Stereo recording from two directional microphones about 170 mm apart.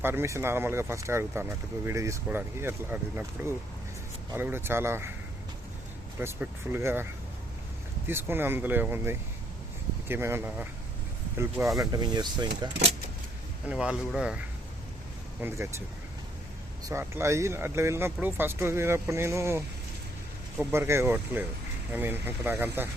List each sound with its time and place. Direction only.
0.0 s speech: 15° right (ahead or behind)
6.1 s speech: 15° right (ahead or behind)
13.7 s speech: 5° right (ahead or behind)
15.4 s speech: 15° right (ahead or behind)
16.9 s speech: 15° right (ahead or behind)